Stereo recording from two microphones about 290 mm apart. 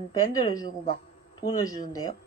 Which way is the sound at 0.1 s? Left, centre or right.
Centre.